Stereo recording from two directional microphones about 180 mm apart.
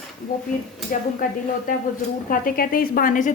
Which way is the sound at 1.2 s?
45° left (ahead or behind).